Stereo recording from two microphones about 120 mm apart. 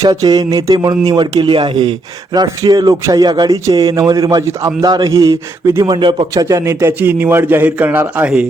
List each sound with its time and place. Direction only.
0.0 s a man's voice: 30° right (ahead or behind)
5.8 s a man's voice: 40° right (ahead or behind); by 8.4 s 10° right (ahead or behind)